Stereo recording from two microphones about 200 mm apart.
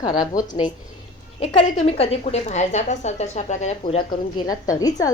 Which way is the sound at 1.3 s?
30° left (ahead or behind).